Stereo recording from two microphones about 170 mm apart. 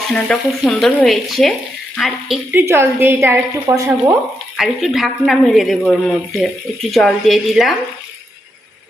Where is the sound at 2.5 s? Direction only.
15° right (ahead or behind).